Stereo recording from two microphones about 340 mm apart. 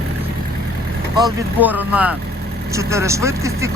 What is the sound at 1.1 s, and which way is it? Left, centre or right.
Speech, centre.